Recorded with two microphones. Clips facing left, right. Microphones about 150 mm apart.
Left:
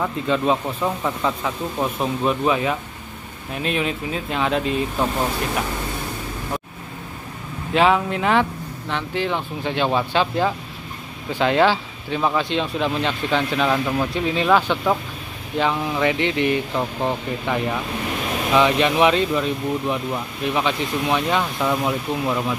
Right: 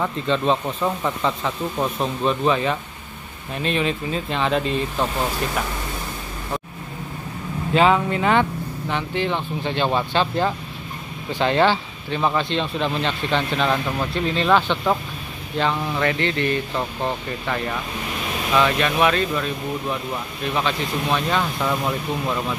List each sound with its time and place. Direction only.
0.0 s speech: 10° left (ahead or behind)
7.7 s speech: centre (ahead or behind)